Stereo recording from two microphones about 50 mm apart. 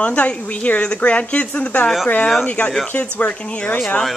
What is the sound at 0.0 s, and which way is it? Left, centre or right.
Speech, left.